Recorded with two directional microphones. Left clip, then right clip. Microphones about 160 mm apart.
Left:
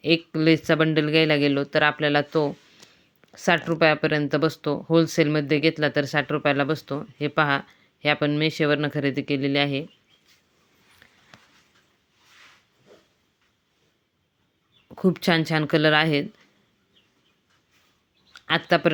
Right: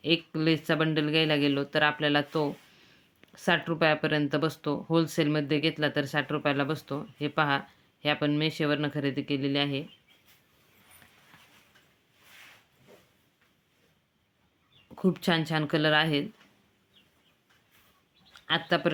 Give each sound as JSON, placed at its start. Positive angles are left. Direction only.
{"t": 0.0, "sound": "speech", "side_deg": 30}
{"t": 14.8, "sound": "speech", "side_deg": 30}
{"t": 18.3, "sound": "speech", "side_deg": 35}